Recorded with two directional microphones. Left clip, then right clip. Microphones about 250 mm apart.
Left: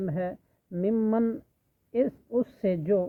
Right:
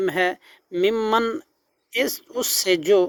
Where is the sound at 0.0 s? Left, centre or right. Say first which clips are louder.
Right 11 dB; right.